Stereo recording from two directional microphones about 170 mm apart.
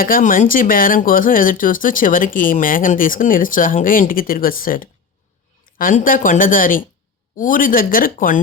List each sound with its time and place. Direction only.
0.0 s speech: 55° left (ahead or behind)